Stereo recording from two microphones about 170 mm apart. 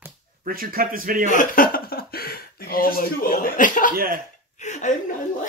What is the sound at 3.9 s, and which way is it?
Speech, 55° right (ahead or behind).